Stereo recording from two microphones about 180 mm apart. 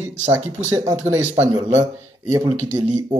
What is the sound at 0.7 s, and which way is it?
Speech, 20° right (ahead or behind).